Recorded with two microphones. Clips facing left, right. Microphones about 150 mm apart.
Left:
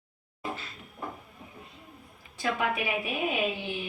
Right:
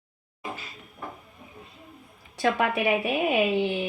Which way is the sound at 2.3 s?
65° right (ahead or behind).